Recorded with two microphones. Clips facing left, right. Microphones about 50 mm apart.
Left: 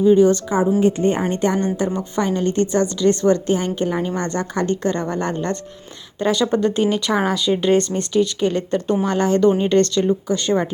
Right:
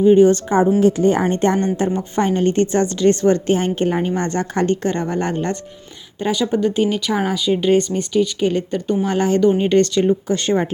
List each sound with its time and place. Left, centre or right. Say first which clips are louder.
0.0 s a woman's voice: right 2 dB; right
0.5 s a woman's voice: right 3 dB; right
0.8 s a woman's voice: right 3 dB; right
1.2 s a woman's voice: right 3 dB; right
1.5 s a woman's voice: right 2 dB; right
6.1 s speech: left 1 dB; centre
10.2 s a woman's voice: right 1 dB; right